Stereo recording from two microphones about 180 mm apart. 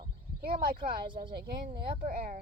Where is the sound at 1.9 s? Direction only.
50° right (ahead or behind).